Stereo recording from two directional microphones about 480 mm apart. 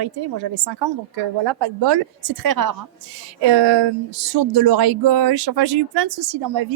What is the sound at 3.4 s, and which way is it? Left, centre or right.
Speech, right.